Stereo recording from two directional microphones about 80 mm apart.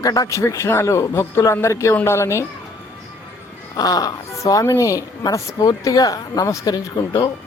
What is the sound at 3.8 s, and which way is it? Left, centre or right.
A woman's voice, left.